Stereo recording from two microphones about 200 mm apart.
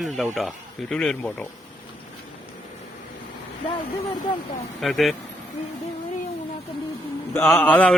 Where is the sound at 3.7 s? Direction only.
25° left (ahead or behind).